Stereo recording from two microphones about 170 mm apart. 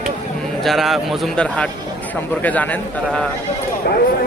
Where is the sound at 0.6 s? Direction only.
Centre (ahead or behind).